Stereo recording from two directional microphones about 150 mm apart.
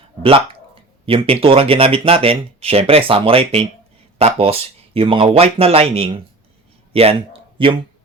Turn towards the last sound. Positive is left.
turn(degrees=-35)  # may be behind; listen again after turning